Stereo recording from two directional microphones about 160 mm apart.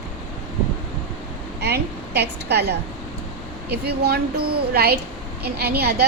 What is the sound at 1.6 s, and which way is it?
A woman's voice, 90° right.